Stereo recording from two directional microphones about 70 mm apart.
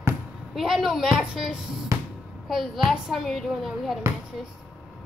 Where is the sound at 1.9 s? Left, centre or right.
Right.